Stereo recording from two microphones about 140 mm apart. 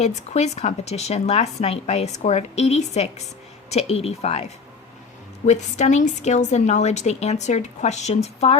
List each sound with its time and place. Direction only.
0.0 s a woman's voice: 55° left (ahead or behind)